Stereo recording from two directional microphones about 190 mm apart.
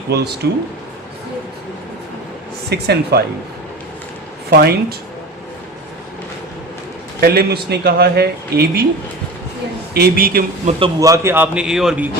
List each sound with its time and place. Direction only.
0.4 s speech: 60° right (ahead or behind)
2.6 s speech: 60° right (ahead or behind)
4.4 s speech: 55° right (ahead or behind)
7.2 s speech: 55° right (ahead or behind)
9.9 s a man's voice: 55° right (ahead or behind)
10.7 s a man's voice: 30° right (ahead or behind)
11.1 s a man's voice: 15° right (ahead or behind)